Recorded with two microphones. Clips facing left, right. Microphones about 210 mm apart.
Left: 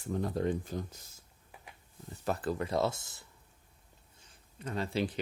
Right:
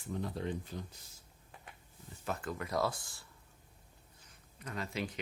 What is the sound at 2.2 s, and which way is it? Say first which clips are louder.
Speech: left 6 dB; 35° left (ahead or behind).